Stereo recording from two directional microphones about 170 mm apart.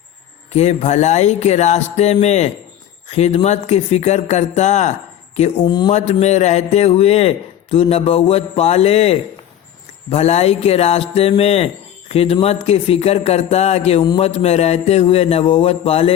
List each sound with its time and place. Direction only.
0.5 s speech: 40° left (ahead or behind)
5.6 s speech: 25° left (ahead or behind)
5.9 s speech: 40° left (ahead or behind)